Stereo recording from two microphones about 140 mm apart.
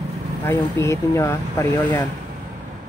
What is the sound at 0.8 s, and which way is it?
Speech, 20° left (ahead or behind).